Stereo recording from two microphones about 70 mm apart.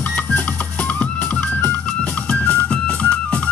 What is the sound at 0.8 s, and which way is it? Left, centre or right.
Music, centre.